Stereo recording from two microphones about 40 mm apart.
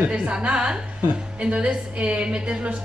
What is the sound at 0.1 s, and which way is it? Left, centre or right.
A woman's voice, right.